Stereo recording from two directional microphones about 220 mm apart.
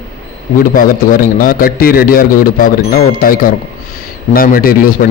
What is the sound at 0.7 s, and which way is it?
A man's voice, 40° left (ahead or behind).